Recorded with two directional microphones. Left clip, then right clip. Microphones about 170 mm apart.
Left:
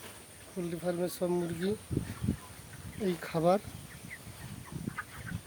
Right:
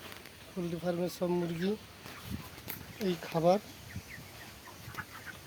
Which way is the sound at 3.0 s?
35° left (ahead or behind).